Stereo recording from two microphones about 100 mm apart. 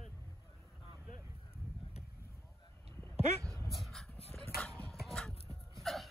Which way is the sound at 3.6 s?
Centre (ahead or behind).